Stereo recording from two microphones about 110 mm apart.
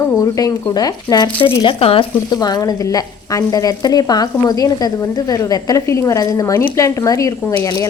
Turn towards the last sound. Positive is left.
turn(degrees=30)  # may be behind; listen again after turning